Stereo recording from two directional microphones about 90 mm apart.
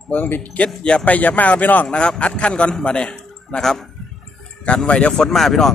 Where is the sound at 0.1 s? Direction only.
20° left (ahead or behind).